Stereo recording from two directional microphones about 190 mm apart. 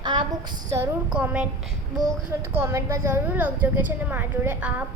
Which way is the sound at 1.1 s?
5° right (ahead or behind).